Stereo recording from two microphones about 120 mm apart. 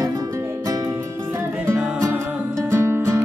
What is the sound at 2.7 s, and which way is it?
Music, 20° right (ahead or behind).